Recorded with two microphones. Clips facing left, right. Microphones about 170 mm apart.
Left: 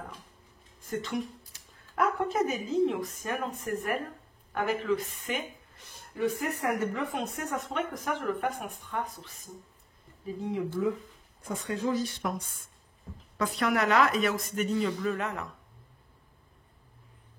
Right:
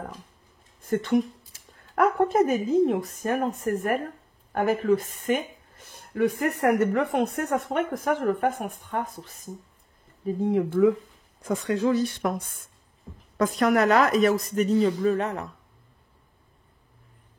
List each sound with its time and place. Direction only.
0.8 s speech: 55° right (ahead or behind)
5.9 s speech: 60° right (ahead or behind)
11.4 s speech: 90° right; by 12.4 s 65° right (ahead or behind)
13.4 s speech: 45° right (ahead or behind)